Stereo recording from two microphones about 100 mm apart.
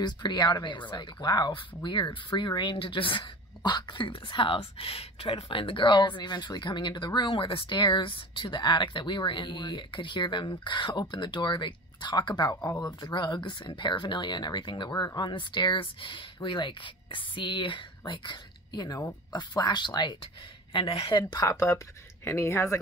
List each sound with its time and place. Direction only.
0.0 s speech: 45° left (ahead or behind)
13.0 s speech: 50° left (ahead or behind)
20.7 s speech: 60° left (ahead or behind)
21.5 s speech: 30° left (ahead or behind)